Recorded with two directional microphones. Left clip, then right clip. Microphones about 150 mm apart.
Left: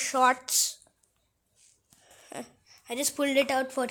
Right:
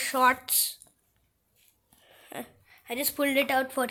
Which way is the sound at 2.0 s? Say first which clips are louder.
Right 1 dB; 15° left (ahead or behind).